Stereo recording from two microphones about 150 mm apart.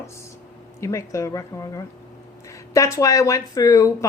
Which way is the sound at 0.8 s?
20° left (ahead or behind).